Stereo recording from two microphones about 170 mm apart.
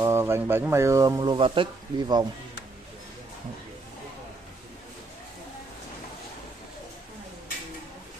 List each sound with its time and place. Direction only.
0.0 s speech: 15° right (ahead or behind)